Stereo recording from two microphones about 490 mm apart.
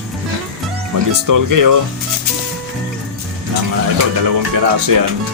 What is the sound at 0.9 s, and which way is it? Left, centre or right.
Speech, right.